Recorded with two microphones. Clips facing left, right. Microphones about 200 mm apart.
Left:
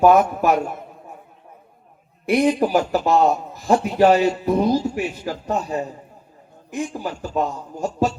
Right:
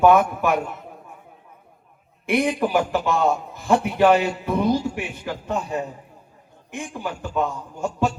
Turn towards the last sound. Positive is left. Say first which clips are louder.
# left 1 dB
turn(degrees=35)  # may be behind; listen again after turning